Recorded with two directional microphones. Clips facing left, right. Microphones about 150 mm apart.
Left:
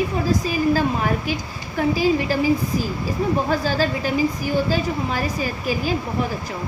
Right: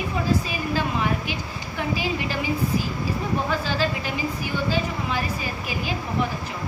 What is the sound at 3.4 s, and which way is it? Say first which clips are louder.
A woman's voice: left 4 dB; 40° left (ahead or behind).